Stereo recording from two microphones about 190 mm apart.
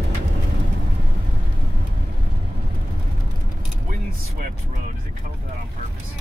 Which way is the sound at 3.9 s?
45° right (ahead or behind).